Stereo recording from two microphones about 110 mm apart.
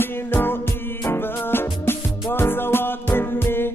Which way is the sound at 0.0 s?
20° left (ahead or behind).